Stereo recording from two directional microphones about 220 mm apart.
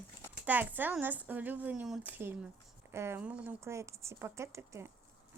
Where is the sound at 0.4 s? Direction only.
10° right (ahead or behind).